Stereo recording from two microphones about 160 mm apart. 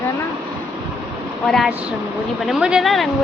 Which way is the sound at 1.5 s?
Centre (ahead or behind).